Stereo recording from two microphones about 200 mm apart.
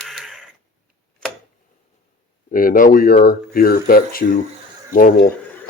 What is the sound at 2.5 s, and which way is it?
Speech, 45° left (ahead or behind).